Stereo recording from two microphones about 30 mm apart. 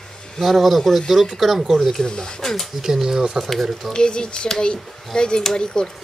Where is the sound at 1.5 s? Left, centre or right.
Centre.